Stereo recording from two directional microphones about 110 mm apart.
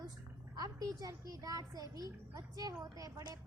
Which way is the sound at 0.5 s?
35° right (ahead or behind).